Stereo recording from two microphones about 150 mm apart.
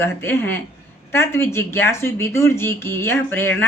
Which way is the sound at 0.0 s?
15° left (ahead or behind).